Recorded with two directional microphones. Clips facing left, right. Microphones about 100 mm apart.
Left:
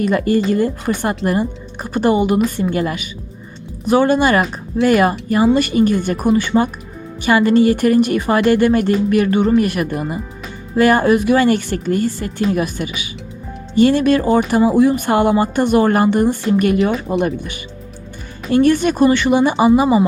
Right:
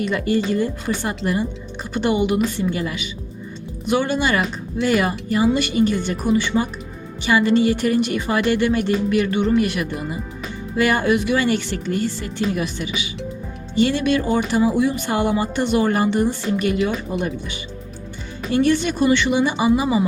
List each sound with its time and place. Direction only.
0.0 s speech: 45° left (ahead or behind)